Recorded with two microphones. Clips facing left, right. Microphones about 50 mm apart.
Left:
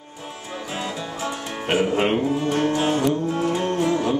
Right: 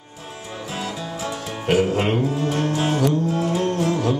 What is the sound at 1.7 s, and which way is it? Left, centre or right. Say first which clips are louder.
Music: right 1 dB; centre.